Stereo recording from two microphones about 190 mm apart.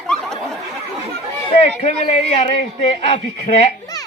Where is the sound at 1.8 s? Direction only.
35° left (ahead or behind).